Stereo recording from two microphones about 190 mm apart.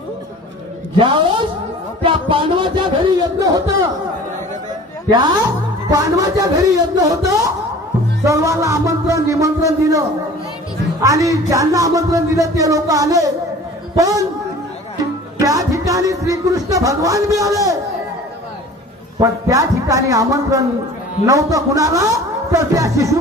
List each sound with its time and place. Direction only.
0.9 s a woman's voice: 25° right (ahead or behind)
5.9 s a man's voice: 20° right (ahead or behind)
15.3 s a man's voice: 20° right (ahead or behind)
19.1 s speech: 15° right (ahead or behind)